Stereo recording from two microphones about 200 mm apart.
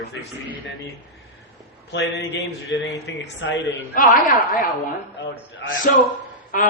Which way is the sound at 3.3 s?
60° left (ahead or behind).